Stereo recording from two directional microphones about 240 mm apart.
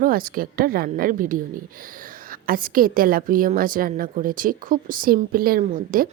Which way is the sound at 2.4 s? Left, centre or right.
Right.